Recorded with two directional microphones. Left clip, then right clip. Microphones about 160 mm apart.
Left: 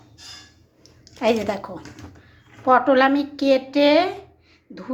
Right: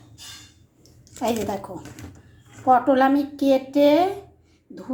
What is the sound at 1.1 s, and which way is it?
A woman's voice, 10° left (ahead or behind).